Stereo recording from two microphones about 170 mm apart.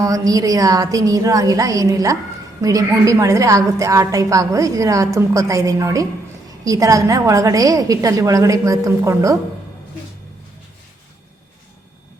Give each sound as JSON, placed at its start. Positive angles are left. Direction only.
{"t": 0.0, "sound": "a woman's voice", "side_deg": -20}